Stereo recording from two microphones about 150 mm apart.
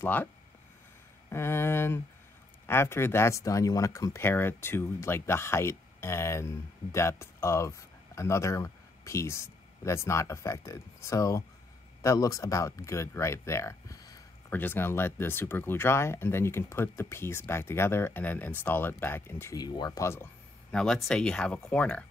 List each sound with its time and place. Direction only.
0.0 s speech: 15° left (ahead or behind)
1.3 s speech: 15° left (ahead or behind)
20.7 s speech: 5° left (ahead or behind)